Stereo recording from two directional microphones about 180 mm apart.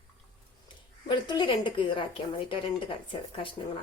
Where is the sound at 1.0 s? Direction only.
25° left (ahead or behind).